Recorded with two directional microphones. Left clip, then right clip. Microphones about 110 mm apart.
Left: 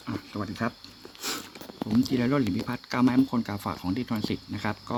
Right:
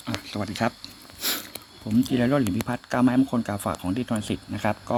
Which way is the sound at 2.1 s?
15° right (ahead or behind).